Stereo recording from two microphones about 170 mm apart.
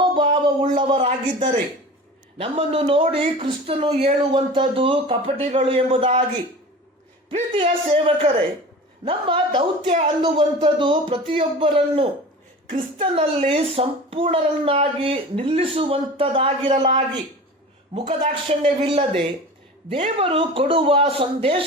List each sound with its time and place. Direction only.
0.0 s a sound: 30° right (ahead or behind)
0.8 s a child's voice: 30° right (ahead or behind)
7.3 s a child's voice: 30° right (ahead or behind)
18.4 s a child's voice: 30° right (ahead or behind)